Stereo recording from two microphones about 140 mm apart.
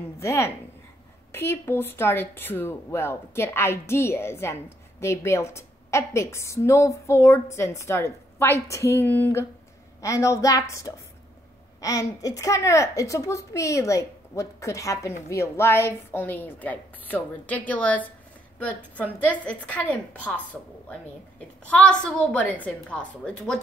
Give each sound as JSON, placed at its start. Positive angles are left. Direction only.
{"t": 0.2, "sound": "speech", "side_deg": 20}
{"t": 21.6, "sound": "speech", "side_deg": 5}